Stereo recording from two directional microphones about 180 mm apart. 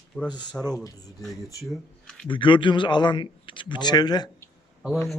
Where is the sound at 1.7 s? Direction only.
5° left (ahead or behind).